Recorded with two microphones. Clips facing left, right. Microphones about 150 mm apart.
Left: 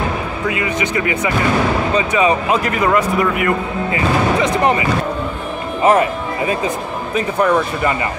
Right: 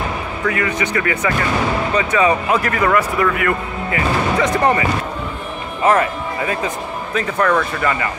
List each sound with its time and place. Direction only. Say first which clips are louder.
0.5 s speech: even; 20° left (ahead or behind)
5.9 s speech: left 2 dB; 20° left (ahead or behind)